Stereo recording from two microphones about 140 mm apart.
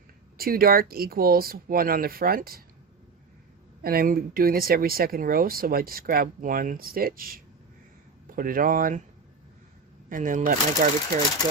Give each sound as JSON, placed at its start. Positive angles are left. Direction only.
{"t": 0.3, "sound": "speech", "side_deg": -90}
{"t": 3.8, "sound": "speech", "side_deg": -85}
{"t": 10.1, "sound": "speech", "side_deg": -70}